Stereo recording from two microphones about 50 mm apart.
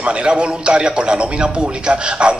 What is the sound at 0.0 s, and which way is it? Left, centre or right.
A man's voice, right.